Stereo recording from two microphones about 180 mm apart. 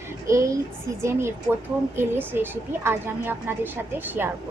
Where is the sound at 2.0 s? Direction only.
10° right (ahead or behind).